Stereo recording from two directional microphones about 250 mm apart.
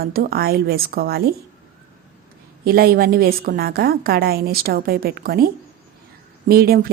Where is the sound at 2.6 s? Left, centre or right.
Right.